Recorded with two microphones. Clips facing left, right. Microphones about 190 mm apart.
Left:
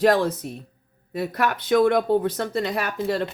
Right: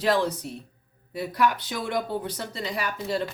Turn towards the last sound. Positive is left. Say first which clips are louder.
# left 4 dB
turn(degrees=60)  # may be behind; listen again after turning